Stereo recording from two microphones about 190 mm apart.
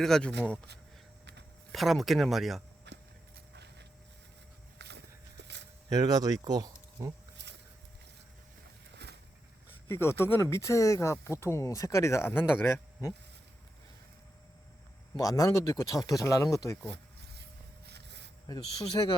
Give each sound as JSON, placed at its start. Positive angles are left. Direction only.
{"t": 0.0, "sound": "speech", "side_deg": 5}
{"t": 1.7, "sound": "speech", "side_deg": 0}
{"t": 2.8, "sound": "walk", "side_deg": -65}
{"t": 4.8, "sound": "a sound", "side_deg": -65}
{"t": 5.9, "sound": "speech", "side_deg": -20}
{"t": 7.4, "sound": "a sound", "side_deg": -65}
{"t": 9.9, "sound": "speech", "side_deg": 15}
{"t": 15.1, "sound": "speech", "side_deg": 15}
{"t": 17.8, "sound": "a sound", "side_deg": -65}
{"t": 19.0, "sound": "speech", "side_deg": 20}